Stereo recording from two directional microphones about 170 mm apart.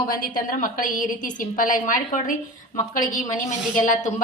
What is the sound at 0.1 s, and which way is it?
A woman's voice, 55° left (ahead or behind).